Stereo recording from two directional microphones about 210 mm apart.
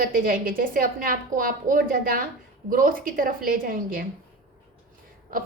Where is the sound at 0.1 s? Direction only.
40° right (ahead or behind).